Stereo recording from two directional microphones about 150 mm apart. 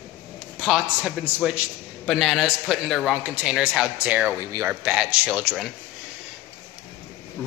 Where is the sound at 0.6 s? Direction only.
Centre (ahead or behind).